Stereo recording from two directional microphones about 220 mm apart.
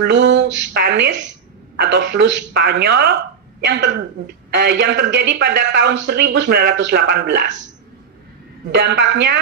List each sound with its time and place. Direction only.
0.0 s speech: 55° right (ahead or behind)
4.6 s speech: 50° right (ahead or behind)
8.7 s speech: 50° right (ahead or behind)